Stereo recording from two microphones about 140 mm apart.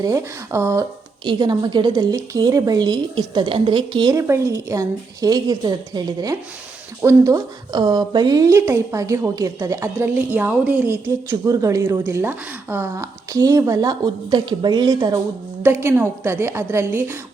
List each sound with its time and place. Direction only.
0.0 s a woman's voice: 20° right (ahead or behind)
1.2 s a woman's voice: 35° right (ahead or behind)
4.2 s a woman's voice: 20° right (ahead or behind)
15.6 s a woman's voice: 15° right (ahead or behind)